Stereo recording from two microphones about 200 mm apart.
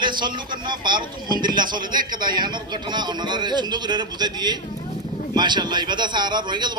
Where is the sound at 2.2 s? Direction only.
20° right (ahead or behind).